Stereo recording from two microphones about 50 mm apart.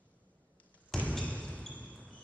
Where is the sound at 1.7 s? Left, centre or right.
Left.